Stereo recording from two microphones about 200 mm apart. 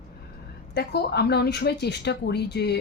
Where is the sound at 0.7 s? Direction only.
55° left (ahead or behind).